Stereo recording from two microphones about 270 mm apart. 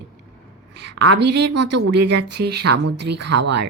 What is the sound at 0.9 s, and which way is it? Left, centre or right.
Speech, right.